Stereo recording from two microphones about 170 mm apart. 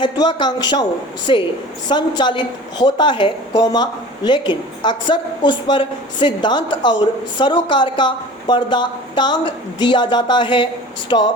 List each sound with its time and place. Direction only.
0.0 s a woman's voice: 25° left (ahead or behind)